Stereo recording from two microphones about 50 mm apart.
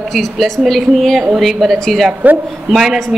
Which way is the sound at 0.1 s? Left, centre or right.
Centre.